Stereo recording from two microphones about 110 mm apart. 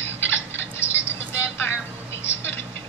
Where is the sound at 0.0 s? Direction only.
25° left (ahead or behind).